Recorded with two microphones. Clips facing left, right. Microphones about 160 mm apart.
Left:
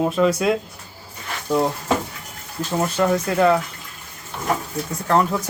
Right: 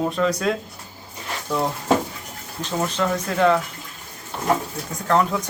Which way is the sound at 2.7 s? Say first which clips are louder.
Left 3 dB; 10° left (ahead or behind).